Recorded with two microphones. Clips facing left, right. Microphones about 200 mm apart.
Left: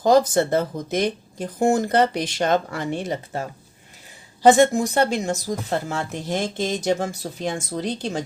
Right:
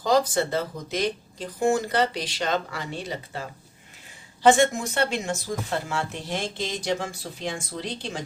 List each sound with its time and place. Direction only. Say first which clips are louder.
0.0 s speech: left 5 dB; 50° left (ahead or behind)
4.4 s speech: left 4 dB; 35° left (ahead or behind)